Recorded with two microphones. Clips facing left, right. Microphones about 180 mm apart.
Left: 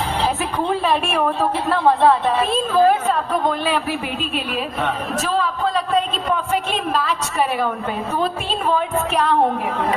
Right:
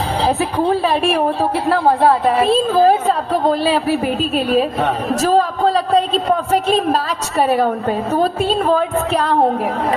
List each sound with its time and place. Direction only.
0.3 s a woman's voice: 35° right (ahead or behind)